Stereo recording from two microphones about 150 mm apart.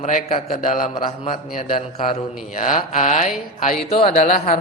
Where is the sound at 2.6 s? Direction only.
60° left (ahead or behind).